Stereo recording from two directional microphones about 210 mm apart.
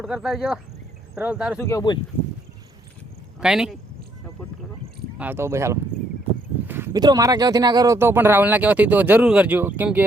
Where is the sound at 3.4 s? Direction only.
5° right (ahead or behind).